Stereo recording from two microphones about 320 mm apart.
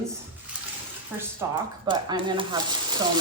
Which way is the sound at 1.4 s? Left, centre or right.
Centre.